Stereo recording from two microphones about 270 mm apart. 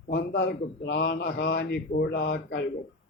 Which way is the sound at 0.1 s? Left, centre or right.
Left.